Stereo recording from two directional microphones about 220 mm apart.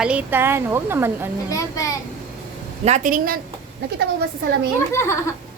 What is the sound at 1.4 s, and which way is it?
Speech, 15° left (ahead or behind).